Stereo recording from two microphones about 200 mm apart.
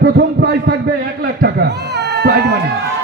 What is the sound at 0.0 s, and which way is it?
A man's voice, 55° right (ahead or behind).